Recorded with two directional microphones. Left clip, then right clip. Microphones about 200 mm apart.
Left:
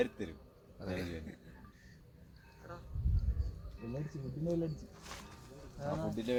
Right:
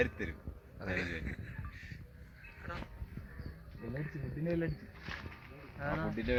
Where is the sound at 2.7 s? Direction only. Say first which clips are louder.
Right 6 dB; 45° left (ahead or behind).